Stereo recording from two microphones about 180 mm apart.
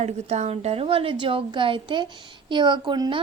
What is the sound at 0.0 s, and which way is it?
A woman's voice, 40° right (ahead or behind).